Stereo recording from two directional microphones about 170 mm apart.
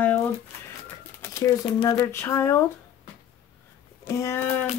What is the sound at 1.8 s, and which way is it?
Speech, 20° left (ahead or behind).